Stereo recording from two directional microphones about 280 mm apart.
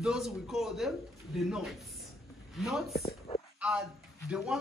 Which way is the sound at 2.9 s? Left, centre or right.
Left.